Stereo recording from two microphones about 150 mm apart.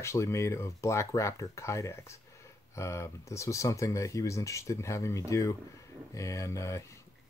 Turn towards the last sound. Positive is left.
turn(degrees=20)  # may be behind; listen again after turning